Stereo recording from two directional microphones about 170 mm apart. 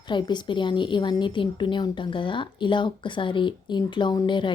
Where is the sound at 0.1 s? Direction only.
25° left (ahead or behind).